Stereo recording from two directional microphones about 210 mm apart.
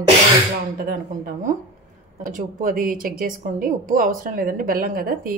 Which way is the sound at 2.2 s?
40° right (ahead or behind).